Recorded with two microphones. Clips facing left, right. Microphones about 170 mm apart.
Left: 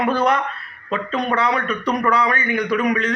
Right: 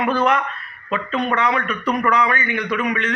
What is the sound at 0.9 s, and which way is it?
A man's voice, 35° left (ahead or behind).